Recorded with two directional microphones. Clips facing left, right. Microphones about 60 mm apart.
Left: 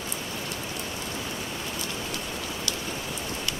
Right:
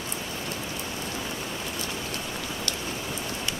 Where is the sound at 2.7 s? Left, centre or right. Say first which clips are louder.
Even; right.